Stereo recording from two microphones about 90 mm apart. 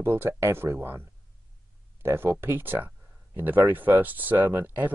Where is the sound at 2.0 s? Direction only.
25° right (ahead or behind).